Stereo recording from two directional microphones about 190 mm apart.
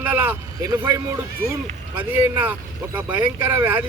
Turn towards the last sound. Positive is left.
turn(degrees=-10)  # may be behind; listen again after turning